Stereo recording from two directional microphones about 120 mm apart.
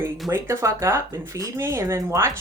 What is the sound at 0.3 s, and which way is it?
Speech, 20° right (ahead or behind).